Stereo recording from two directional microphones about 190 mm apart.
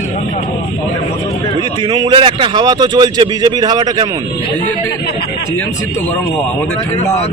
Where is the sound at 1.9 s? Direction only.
25° right (ahead or behind).